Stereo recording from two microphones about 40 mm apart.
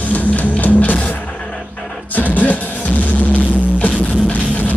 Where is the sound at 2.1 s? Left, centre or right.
Left.